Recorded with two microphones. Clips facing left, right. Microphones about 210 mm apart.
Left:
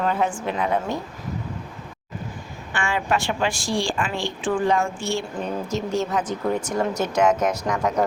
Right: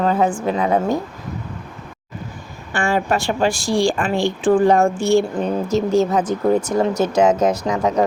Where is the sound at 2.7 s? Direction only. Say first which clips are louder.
Right 5 dB; 40° right (ahead or behind).